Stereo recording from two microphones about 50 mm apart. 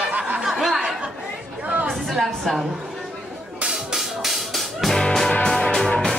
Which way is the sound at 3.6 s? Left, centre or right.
Centre.